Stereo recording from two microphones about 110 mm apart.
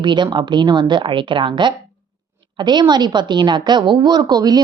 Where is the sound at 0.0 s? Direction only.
45° right (ahead or behind).